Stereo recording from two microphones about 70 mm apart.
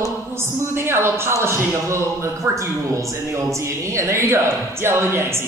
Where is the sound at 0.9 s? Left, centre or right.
Right.